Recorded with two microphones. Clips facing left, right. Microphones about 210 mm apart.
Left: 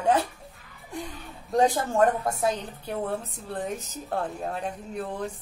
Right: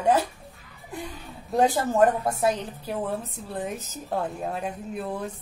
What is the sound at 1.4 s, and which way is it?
A woman's voice, 5° right (ahead or behind).